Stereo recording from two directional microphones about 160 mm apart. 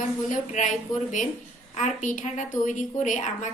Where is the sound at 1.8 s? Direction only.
50° left (ahead or behind).